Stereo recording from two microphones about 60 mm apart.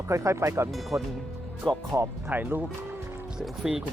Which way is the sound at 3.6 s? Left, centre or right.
Centre.